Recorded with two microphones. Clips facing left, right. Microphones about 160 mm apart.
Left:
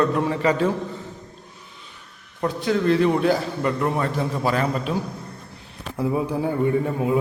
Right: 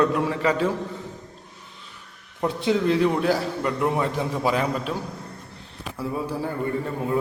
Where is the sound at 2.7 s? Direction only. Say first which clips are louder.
Left 3 dB; 10° right (ahead or behind).